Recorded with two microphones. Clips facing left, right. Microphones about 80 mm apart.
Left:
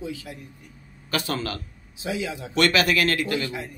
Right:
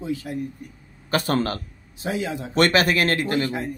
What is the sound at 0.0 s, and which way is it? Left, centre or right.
Speech, right.